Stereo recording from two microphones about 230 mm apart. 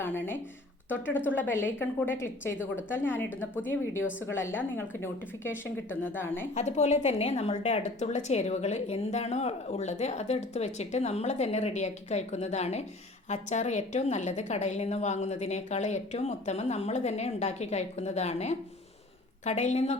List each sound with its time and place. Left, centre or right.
0.0 s a woman's voice: centre
1.4 s a woman's voice: centre
6.5 s a woman's voice: left